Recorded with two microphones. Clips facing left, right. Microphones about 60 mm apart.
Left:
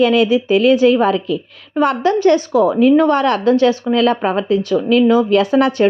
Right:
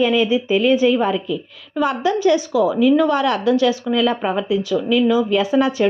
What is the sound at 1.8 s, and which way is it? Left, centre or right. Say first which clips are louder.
A woman's voice: left 4 dB; left.